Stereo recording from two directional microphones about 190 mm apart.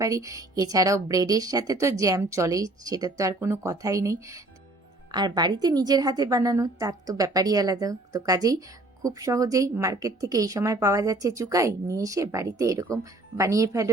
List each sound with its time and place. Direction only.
0.0 s a woman's voice: 15° right (ahead or behind)